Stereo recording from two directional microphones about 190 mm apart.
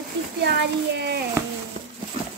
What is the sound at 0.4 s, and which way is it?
Speech, 60° right (ahead or behind).